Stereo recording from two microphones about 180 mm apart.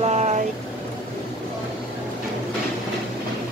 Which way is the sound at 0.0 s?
40° right (ahead or behind).